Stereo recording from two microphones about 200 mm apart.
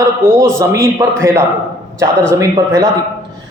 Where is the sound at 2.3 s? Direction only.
15° right (ahead or behind).